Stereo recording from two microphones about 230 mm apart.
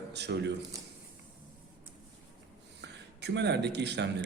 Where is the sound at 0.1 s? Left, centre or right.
Right.